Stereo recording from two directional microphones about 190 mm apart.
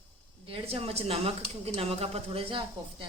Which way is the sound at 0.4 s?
30° right (ahead or behind).